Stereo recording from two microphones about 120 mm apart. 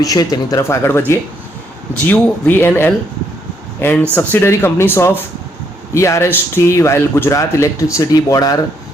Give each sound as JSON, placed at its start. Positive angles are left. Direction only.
{"t": 0.0, "sound": "speech", "side_deg": 30}